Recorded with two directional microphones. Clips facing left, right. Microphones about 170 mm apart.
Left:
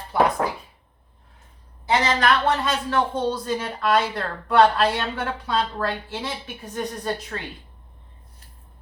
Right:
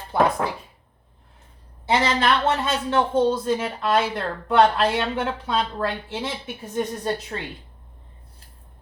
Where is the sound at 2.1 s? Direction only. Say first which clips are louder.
Even; 25° right (ahead or behind).